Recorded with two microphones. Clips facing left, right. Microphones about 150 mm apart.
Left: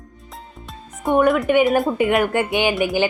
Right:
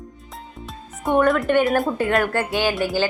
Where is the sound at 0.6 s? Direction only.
5° left (ahead or behind).